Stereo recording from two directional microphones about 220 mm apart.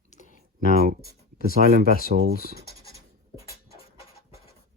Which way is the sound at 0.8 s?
45° right (ahead or behind).